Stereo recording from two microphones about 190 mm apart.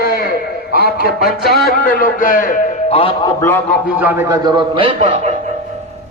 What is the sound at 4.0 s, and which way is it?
A man's voice, 10° right (ahead or behind).